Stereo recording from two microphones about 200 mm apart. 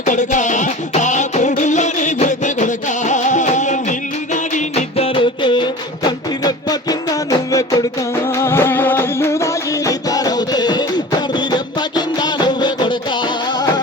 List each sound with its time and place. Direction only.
0.0 s music: 40° left (ahead or behind); by 12.9 s 20° left (ahead or behind)